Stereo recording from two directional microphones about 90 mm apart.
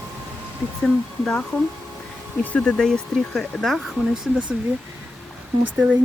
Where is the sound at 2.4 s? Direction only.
15° left (ahead or behind).